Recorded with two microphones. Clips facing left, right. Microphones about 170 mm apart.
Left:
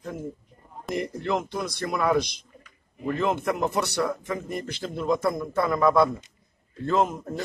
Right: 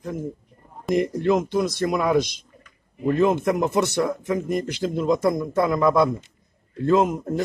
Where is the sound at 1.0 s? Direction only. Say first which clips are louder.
Right 7 dB; 20° right (ahead or behind).